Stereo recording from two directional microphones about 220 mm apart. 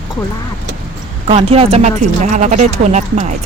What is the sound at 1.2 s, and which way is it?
Speech, 25° right (ahead or behind).